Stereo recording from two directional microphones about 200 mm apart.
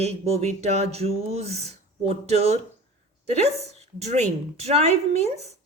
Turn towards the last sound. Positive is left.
turn(degrees=-35)  # may be behind; listen again after turning